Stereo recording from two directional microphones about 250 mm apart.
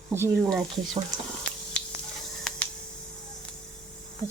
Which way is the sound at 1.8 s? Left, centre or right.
Centre.